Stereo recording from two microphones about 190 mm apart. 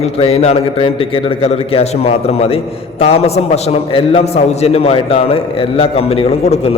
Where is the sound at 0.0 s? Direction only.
30° left (ahead or behind).